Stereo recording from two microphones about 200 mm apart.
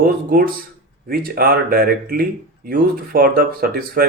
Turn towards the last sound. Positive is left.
turn(degrees=-45)  # may be behind; listen again after turning